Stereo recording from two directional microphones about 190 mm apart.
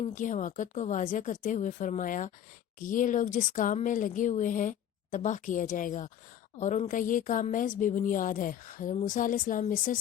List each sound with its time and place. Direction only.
0.0 s a woman's voice: 45° left (ahead or behind)